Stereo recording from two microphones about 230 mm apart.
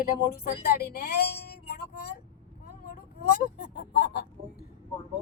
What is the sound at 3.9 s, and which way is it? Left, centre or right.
Chicken, left.